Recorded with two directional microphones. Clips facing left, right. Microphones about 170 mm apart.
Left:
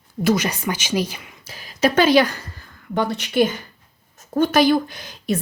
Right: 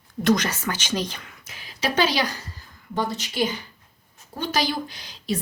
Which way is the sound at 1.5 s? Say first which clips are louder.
Left 8 dB; 40° left (ahead or behind).